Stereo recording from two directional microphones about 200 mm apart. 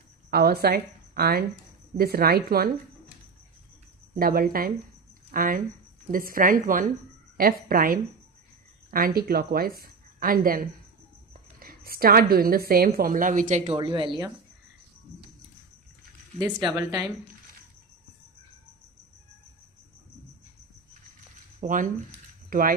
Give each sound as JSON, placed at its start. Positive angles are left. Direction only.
{"t": 0.3, "sound": "a woman's voice", "side_deg": -50}
{"t": 4.1, "sound": "a woman's voice", "side_deg": -45}
{"t": 13.7, "sound": "speech", "side_deg": -25}
{"t": 16.7, "sound": "a woman's voice", "side_deg": -15}
{"t": 21.6, "sound": "speech", "side_deg": -40}